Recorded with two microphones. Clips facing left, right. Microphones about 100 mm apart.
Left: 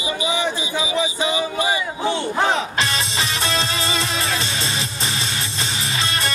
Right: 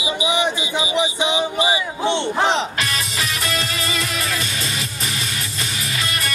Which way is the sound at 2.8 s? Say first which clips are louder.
Left 2 dB; 30° left (ahead or behind).